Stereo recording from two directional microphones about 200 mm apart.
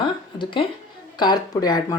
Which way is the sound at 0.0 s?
25° left (ahead or behind).